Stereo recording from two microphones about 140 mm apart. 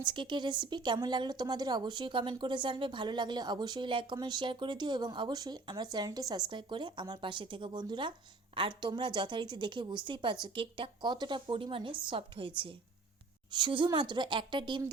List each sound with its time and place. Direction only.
0.0 s a woman's voice: 35° right (ahead or behind)